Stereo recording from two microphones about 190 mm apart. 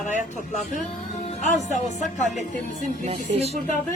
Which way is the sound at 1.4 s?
40° left (ahead or behind).